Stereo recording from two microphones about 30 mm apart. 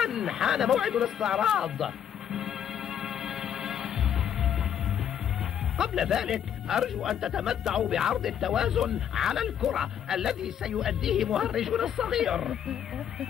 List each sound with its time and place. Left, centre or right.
0.0 s speech: centre
2.3 s music: centre
5.8 s speech: centre